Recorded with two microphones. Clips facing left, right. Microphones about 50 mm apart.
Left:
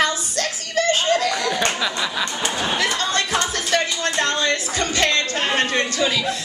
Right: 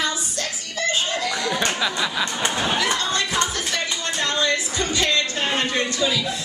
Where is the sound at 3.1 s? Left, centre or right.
Left.